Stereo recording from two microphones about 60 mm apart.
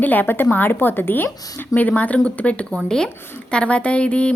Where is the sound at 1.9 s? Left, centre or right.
Left.